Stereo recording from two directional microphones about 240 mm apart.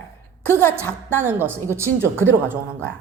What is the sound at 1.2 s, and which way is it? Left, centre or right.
A woman's voice, centre.